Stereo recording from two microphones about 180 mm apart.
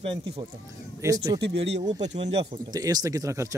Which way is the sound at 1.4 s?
70° right (ahead or behind).